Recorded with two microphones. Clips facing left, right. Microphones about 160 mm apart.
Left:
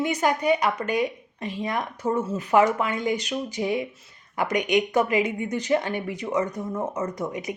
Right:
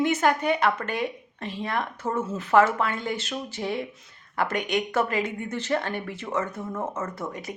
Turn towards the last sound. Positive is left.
turn(degrees=15)  # may be behind; listen again after turning